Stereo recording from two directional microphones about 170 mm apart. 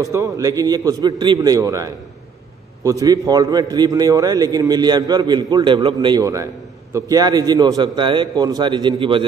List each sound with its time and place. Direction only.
0.0 s a man's voice: 20° right (ahead or behind)